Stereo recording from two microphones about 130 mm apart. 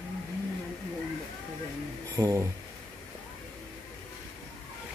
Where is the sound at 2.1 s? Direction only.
25° right (ahead or behind).